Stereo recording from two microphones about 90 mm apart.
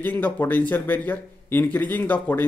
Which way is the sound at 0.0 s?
20° left (ahead or behind).